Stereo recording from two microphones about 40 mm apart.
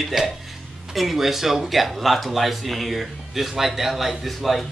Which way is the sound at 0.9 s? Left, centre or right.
Centre.